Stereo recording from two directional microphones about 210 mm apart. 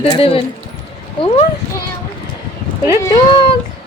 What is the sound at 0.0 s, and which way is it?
Speech, 25° left (ahead or behind).